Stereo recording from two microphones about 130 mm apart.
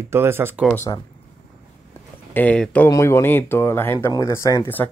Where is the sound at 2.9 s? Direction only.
20° left (ahead or behind).